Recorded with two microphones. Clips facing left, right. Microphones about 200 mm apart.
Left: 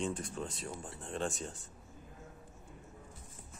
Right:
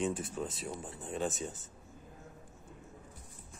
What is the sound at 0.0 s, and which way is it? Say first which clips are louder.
Speech: right 3 dB; 5° right (ahead or behind).